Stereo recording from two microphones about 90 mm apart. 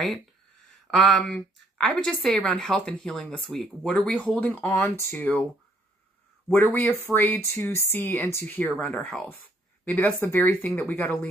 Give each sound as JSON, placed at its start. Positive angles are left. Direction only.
{"t": 0.8, "sound": "a woman's voice", "side_deg": 0}
{"t": 4.7, "sound": "speech", "side_deg": 30}
{"t": 6.5, "sound": "speech", "side_deg": 20}
{"t": 8.5, "sound": "a woman's voice", "side_deg": 15}